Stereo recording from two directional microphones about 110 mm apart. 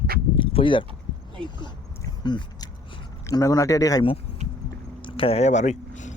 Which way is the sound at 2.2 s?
40° left (ahead or behind).